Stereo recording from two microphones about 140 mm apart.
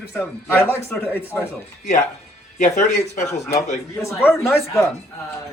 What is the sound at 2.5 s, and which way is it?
Speech, 60° left (ahead or behind).